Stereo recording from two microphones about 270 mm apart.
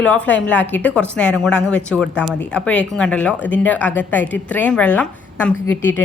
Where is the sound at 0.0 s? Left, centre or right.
Centre.